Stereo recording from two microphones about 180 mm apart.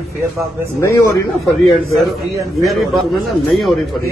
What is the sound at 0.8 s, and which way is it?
Speech, 15° left (ahead or behind).